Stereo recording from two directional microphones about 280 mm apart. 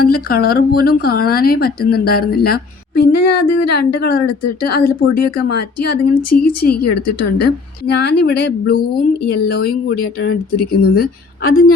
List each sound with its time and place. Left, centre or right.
0.0 s speech: left
7.0 s a woman's voice: left
7.4 s speech: left